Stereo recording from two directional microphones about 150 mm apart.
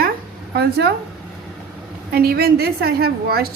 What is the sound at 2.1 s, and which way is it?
Speech, 90° right.